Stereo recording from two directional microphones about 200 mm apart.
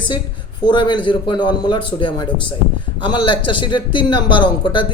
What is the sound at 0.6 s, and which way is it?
A man's voice, 20° left (ahead or behind).